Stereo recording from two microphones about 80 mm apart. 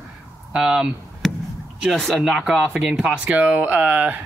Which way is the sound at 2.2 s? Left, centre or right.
Centre.